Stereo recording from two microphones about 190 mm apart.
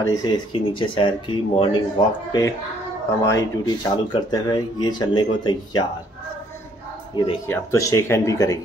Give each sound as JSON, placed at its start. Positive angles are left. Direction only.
{"t": 0.0, "sound": "speech", "side_deg": 20}
{"t": 7.4, "sound": "speech", "side_deg": 15}